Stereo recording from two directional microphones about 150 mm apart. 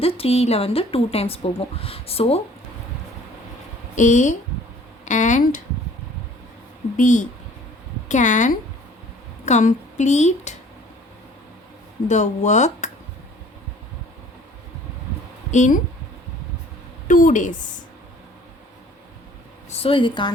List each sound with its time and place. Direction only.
0.0 s a woman's voice: 40° left (ahead or behind)
3.9 s a woman's voice: 55° left (ahead or behind)
6.9 s a woman's voice: 55° left (ahead or behind)
12.0 s a woman's voice: 50° left (ahead or behind)
15.5 s speech: 55° left (ahead or behind)
17.1 s speech: 60° left (ahead or behind)
19.7 s a woman's voice: 40° left (ahead or behind)